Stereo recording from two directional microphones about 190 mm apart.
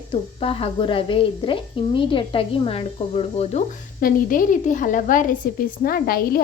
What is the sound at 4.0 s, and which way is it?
A woman's voice, 45° left (ahead or behind).